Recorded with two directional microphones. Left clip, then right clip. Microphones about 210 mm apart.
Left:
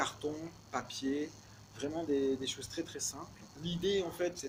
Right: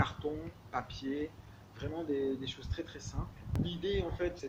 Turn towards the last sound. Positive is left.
turn(degrees=50)  # may be behind; listen again after turning